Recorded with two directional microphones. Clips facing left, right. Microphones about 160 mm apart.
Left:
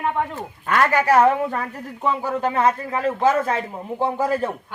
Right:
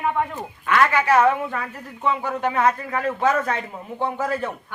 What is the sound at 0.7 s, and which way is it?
Speech, 40° left (ahead or behind).